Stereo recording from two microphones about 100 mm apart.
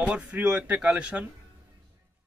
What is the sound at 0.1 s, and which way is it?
Speech, 10° right (ahead or behind).